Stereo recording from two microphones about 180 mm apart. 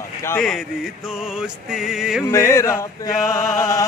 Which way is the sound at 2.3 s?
15° left (ahead or behind).